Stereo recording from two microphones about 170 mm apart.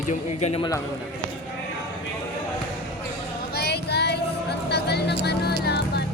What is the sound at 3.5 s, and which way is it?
Child singing, 70° left (ahead or behind).